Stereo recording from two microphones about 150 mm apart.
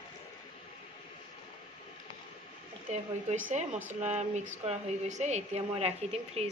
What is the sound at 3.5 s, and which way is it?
A woman's voice, 50° right (ahead or behind).